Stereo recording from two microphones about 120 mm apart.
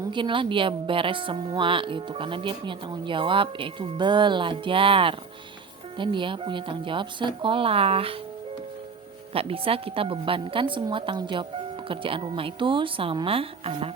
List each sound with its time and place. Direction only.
0.1 s speech: 45° right (ahead or behind)
9.3 s speech: 50° right (ahead or behind)